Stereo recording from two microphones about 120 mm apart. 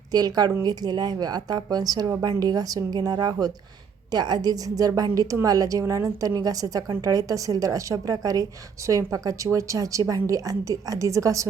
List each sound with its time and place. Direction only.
0.1 s a woman's voice: 35° right (ahead or behind)